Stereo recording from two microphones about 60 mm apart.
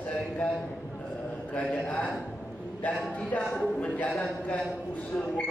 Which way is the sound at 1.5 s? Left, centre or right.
Left.